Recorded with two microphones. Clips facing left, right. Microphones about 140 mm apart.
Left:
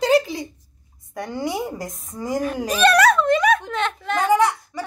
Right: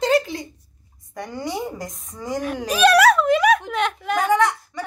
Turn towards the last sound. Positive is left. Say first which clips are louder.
# left 1 dB
turn(degrees=5)  # may be behind; listen again after turning